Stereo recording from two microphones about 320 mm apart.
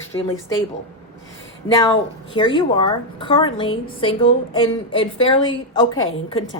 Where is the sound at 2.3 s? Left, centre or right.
Centre.